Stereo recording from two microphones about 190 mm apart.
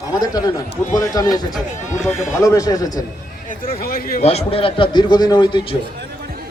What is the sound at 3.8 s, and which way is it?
Speech, 50° left (ahead or behind).